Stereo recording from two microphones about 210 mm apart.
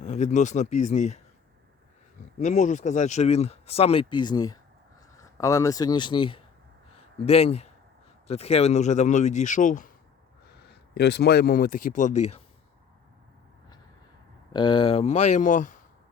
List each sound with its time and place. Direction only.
0.0 s speech: 35° left (ahead or behind)
2.4 s speech: 35° left (ahead or behind)
6.9 s a sound: 30° left (ahead or behind)
8.3 s speech: 30° left (ahead or behind)
10.4 s speech: 55° left (ahead or behind); by 12.2 s 35° left (ahead or behind)
14.5 s speech: 25° left (ahead or behind)